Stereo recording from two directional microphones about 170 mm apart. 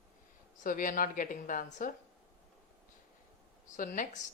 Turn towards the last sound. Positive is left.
turn(degrees=50)  # may be behind; listen again after turning